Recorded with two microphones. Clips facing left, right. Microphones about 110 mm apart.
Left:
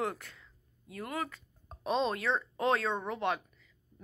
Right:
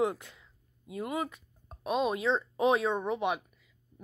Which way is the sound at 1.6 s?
5° right (ahead or behind).